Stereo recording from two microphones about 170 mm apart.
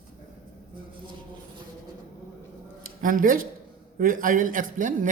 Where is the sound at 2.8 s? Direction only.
55° right (ahead or behind).